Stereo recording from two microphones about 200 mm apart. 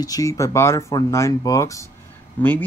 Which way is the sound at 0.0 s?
15° left (ahead or behind).